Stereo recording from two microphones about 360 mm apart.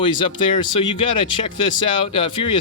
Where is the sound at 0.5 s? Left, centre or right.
Left.